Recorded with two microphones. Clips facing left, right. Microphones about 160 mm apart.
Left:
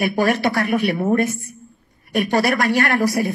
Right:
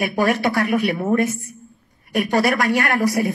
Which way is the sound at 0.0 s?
35° left (ahead or behind).